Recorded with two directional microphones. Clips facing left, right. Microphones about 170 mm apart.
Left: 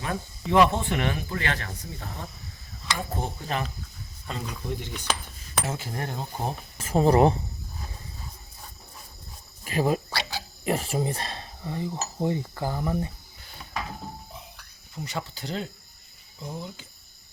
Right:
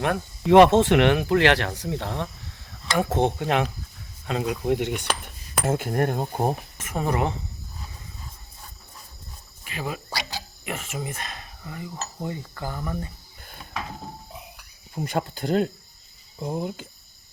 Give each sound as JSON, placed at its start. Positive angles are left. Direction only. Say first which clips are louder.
{"t": 0.0, "sound": "speech", "louder": "right 7 dB", "side_deg": -75}
{"t": 5.6, "sound": "cutlery", "louder": "right 12 dB", "side_deg": -55}
{"t": 6.7, "sound": "speech", "louder": "left 6 dB", "side_deg": 30}
{"t": 9.6, "sound": "speech", "louder": "left 8 dB", "side_deg": 40}
{"t": 10.1, "sound": "cricket", "louder": "even", "side_deg": -15}
{"t": 10.6, "sound": "speech", "louder": "left 7 dB", "side_deg": 35}
{"t": 14.9, "sound": "speech", "louder": "right 7 dB", "side_deg": -50}